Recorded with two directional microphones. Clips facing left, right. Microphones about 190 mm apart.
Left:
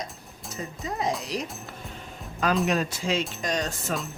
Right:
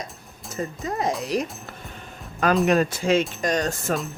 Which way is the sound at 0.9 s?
50° right (ahead or behind).